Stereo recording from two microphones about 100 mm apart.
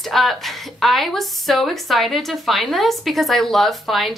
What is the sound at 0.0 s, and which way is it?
A woman's voice, centre (ahead or behind).